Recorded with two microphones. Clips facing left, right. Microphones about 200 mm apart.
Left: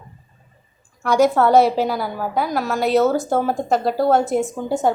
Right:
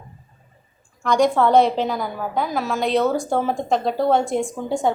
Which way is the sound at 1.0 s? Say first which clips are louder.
Left 2 dB; 5° left (ahead or behind).